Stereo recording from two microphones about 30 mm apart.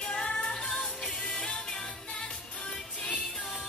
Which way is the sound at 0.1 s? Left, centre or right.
Left.